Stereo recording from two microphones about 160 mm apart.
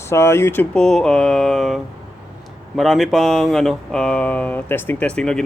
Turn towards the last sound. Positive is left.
turn(degrees=5)  # may be behind; listen again after turning